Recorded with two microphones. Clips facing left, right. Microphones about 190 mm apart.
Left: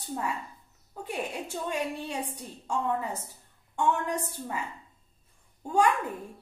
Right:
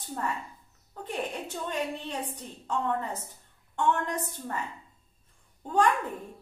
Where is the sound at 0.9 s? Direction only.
10° left (ahead or behind).